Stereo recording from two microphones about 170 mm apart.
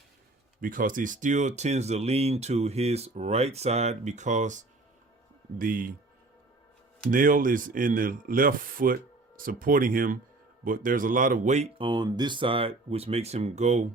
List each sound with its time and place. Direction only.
0.6 s speech: 55° right (ahead or behind)
7.1 s speech: 55° right (ahead or behind)
11.8 s speech: 25° right (ahead or behind); by 13.8 s 40° right (ahead or behind)